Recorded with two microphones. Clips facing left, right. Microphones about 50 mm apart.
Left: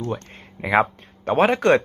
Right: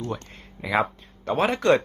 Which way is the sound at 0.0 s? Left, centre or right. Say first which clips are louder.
Left 3 dB; left.